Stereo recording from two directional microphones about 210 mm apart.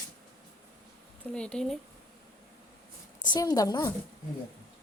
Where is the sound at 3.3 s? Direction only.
15° left (ahead or behind).